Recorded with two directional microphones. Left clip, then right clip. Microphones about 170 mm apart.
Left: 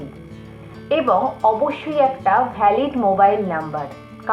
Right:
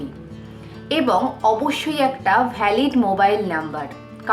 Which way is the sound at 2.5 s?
20° right (ahead or behind).